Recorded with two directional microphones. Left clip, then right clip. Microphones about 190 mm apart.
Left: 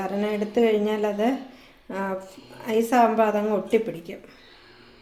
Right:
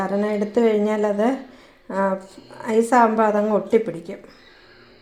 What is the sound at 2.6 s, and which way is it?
Speech, 30° right (ahead or behind).